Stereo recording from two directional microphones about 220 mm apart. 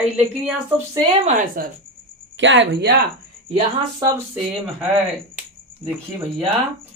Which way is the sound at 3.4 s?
25° right (ahead or behind).